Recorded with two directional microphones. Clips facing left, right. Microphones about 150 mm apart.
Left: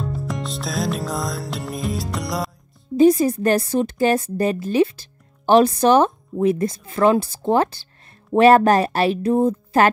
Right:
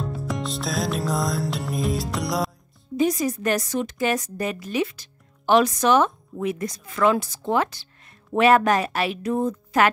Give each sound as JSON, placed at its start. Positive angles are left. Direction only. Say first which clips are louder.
{"t": 0.0, "sound": "music", "louder": "left 1 dB", "side_deg": 0}
{"t": 3.0, "sound": "a woman's voice", "louder": "left 8 dB", "side_deg": 30}